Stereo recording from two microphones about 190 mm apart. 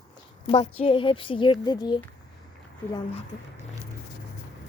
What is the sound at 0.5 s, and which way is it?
A woman's voice, 35° left (ahead or behind).